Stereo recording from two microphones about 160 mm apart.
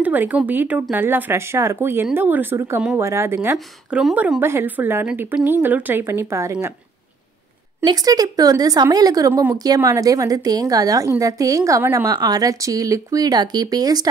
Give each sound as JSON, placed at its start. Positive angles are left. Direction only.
{"t": 0.0, "sound": "a woman's voice", "side_deg": -10}
{"t": 3.5, "sound": "a woman's voice", "side_deg": -5}
{"t": 7.8, "sound": "speech", "side_deg": -25}